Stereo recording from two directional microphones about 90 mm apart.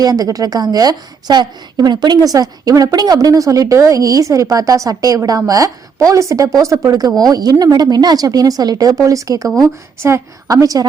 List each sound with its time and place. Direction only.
0.0 s a woman's voice: 45° right (ahead or behind)
10.5 s a woman's voice: 40° right (ahead or behind)